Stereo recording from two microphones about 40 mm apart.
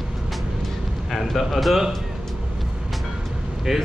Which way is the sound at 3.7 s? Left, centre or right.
Centre.